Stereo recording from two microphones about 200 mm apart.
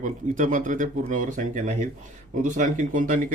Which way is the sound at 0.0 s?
40° right (ahead or behind).